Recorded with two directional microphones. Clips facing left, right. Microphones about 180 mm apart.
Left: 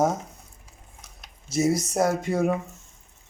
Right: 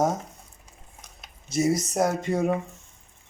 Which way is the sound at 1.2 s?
5° left (ahead or behind).